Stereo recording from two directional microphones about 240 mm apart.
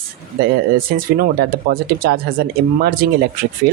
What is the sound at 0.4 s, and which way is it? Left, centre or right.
Speech, right.